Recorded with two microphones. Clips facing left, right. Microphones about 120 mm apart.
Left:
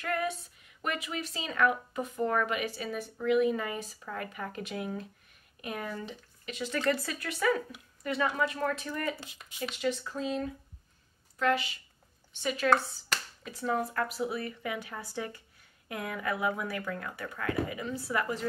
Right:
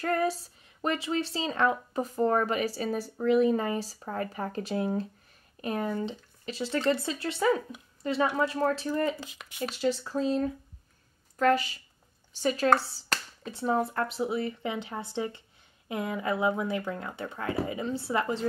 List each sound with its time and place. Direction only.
0.0 s speech: 35° right (ahead or behind)